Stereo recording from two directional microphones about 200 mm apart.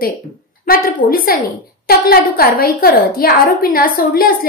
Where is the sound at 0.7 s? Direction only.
50° left (ahead or behind).